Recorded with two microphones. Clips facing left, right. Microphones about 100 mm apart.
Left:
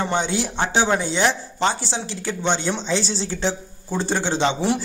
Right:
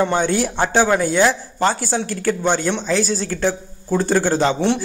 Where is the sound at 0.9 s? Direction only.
20° left (ahead or behind).